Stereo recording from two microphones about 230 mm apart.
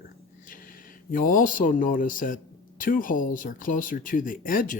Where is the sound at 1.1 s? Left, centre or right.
Left.